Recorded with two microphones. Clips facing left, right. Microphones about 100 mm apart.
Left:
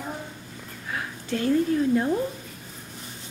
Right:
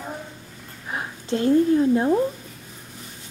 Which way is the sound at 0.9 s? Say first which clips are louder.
Right 3 dB; 25° right (ahead or behind).